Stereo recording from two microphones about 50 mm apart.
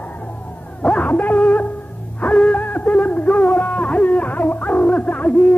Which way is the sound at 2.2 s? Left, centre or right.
Left.